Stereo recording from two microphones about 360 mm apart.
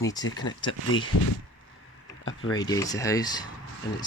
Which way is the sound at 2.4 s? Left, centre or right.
Centre.